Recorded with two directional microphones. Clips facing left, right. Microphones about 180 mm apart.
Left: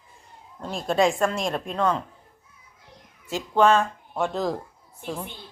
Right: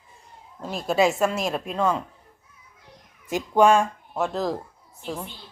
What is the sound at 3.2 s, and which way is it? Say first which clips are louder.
Speech: right 2 dB; 15° right (ahead or behind).